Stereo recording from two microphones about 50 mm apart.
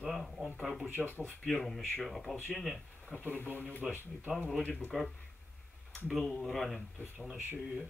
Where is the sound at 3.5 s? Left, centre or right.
Left.